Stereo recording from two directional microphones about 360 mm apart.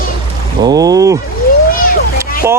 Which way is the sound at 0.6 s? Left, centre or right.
Centre.